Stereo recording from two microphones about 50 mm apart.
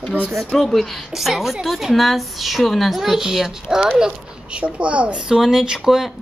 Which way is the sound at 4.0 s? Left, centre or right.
Right.